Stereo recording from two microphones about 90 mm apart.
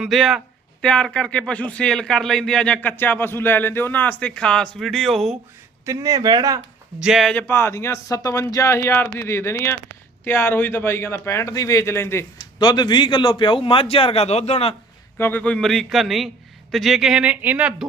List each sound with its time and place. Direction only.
0.0 s a man's voice: centre (ahead or behind)
0.8 s a man's voice: 10° left (ahead or behind)
5.8 s speech: 35° right (ahead or behind)
7.0 s a man's voice: 5° right (ahead or behind)
7.4 s a man's voice: 30° left (ahead or behind)
12.5 s a man's voice: 55° left (ahead or behind); by 14.8 s 90° left
15.2 s a man's voice: 20° left (ahead or behind); by 17.7 s 15° right (ahead or behind)